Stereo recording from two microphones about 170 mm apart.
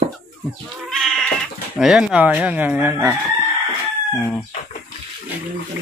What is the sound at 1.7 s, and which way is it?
Speech, 5° right (ahead or behind).